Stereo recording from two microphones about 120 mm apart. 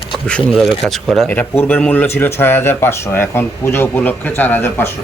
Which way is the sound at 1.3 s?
15° left (ahead or behind).